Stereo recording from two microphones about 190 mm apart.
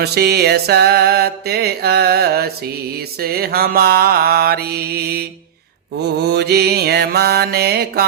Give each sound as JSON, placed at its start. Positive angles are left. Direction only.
{"t": 0.0, "sound": "music", "side_deg": -60}
{"t": 3.2, "sound": "mantra", "side_deg": -55}
{"t": 6.1, "sound": "music", "side_deg": -60}